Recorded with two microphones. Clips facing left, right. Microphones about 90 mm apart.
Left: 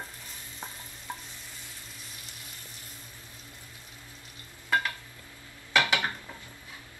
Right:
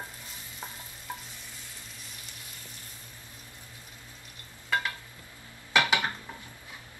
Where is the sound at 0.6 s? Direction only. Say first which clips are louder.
Even; 15° left (ahead or behind).